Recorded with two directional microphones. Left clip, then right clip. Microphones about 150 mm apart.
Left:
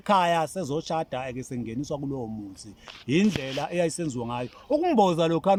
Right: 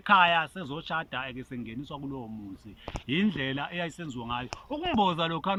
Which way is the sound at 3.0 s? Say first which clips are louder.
Left 4 dB; 25° left (ahead or behind).